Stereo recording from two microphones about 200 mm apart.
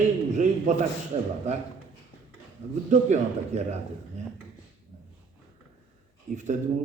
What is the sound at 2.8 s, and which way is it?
Speech, 35° right (ahead or behind).